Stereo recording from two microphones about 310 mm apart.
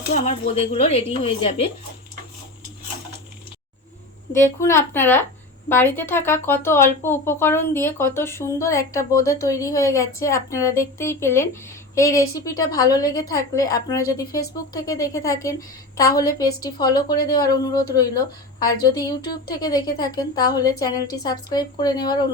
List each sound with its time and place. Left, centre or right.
0.1 s speech: centre
4.6 s speech: centre